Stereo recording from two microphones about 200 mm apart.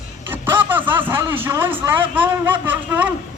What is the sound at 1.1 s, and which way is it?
A man's voice, 10° right (ahead or behind).